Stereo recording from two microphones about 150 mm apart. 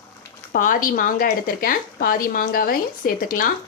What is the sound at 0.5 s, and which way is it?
Speech, 65° left (ahead or behind).